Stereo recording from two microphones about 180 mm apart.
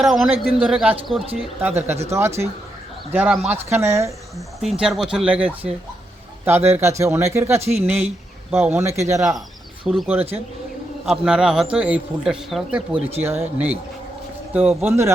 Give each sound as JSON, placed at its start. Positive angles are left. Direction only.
{"t": 0.0, "sound": "a man's voice", "side_deg": 0}
{"t": 4.4, "sound": "a man's voice", "side_deg": 0}
{"t": 9.8, "sound": "speech", "side_deg": 0}
{"t": 11.1, "sound": "a man's voice", "side_deg": -5}